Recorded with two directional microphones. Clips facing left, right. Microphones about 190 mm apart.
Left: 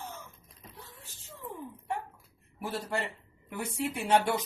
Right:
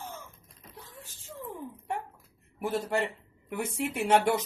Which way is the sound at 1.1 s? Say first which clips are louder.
Right 7 dB; 50° right (ahead or behind).